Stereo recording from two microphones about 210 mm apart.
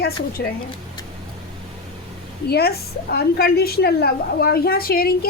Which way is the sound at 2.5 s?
50° left (ahead or behind).